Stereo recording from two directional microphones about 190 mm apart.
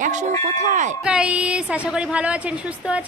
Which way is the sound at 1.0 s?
5° right (ahead or behind).